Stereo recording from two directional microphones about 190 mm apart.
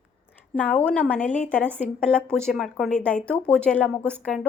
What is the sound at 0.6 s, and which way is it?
Speech, 10° left (ahead or behind).